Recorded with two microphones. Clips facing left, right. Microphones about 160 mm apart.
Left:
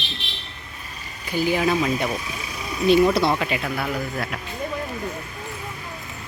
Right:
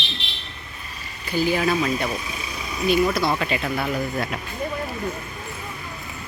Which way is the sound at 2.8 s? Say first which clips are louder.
Left 3 dB; 30° left (ahead or behind).